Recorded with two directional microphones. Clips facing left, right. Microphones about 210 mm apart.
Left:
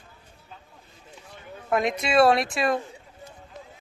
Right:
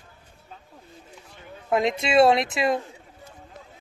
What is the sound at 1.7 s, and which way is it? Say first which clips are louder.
A woman's voice: right 2 dB; 25° right (ahead or behind).